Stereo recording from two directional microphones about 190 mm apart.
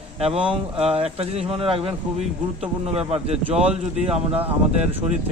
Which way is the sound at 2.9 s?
30° right (ahead or behind).